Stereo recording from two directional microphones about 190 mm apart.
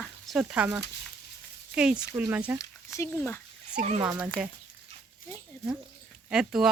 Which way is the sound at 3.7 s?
40° right (ahead or behind).